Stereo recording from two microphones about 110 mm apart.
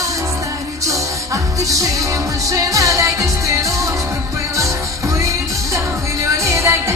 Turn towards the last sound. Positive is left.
turn(degrees=-25)  # may be behind; listen again after turning